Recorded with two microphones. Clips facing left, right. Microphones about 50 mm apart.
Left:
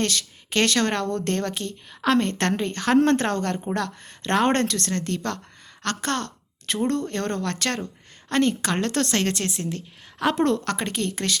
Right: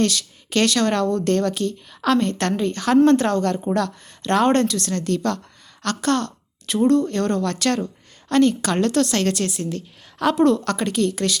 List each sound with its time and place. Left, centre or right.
0.0 s a woman's voice: left
10.3 s speech: left